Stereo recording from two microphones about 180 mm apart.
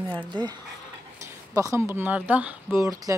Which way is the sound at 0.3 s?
25° right (ahead or behind).